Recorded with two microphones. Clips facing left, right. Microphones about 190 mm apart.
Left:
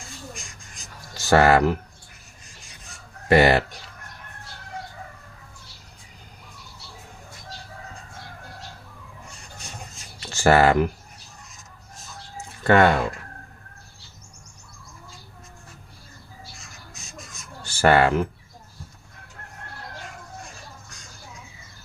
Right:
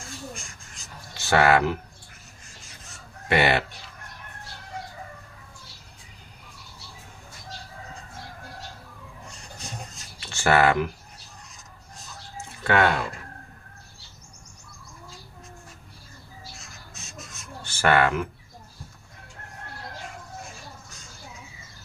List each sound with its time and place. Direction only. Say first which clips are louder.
1.1 s speech: left 3 dB; 40° left (ahead or behind)
3.2 s speech: left 5 dB; 40° left (ahead or behind)
10.2 s a sound: left 3 dB; 35° left (ahead or behind)
12.6 s speech: left 5 dB; 45° left (ahead or behind)
17.7 s speech: left 3 dB; 35° left (ahead or behind)